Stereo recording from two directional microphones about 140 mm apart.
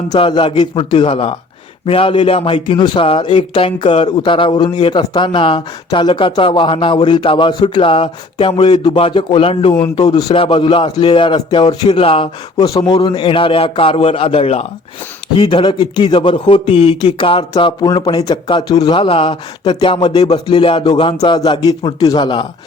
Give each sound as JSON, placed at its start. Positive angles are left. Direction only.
{"t": 0.2, "sound": "a man's voice", "side_deg": 35}
{"t": 9.9, "sound": "a man's voice", "side_deg": 30}
{"t": 12.5, "sound": "a man's voice", "side_deg": 25}
{"t": 15.4, "sound": "a man's voice", "side_deg": 35}